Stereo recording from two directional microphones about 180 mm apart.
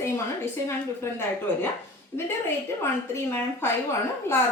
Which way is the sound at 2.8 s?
15° left (ahead or behind).